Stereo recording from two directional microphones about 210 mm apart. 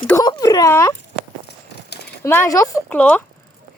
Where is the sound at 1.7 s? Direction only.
50° left (ahead or behind).